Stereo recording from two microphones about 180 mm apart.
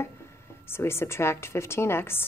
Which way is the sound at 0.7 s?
15° left (ahead or behind).